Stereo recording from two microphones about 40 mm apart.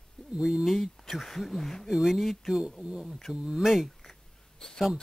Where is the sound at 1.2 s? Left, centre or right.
Centre.